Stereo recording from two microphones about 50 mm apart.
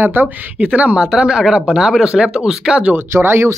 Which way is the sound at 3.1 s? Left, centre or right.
Right.